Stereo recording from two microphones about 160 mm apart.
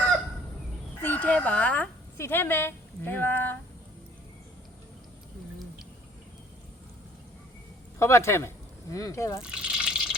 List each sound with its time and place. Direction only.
1.0 s speech: 10° left (ahead or behind)
7.9 s speech: 20° left (ahead or behind)
9.4 s water: 5° right (ahead or behind)